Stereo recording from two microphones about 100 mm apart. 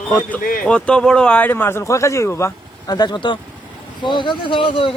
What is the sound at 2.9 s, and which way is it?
A man's voice, 45° left (ahead or behind).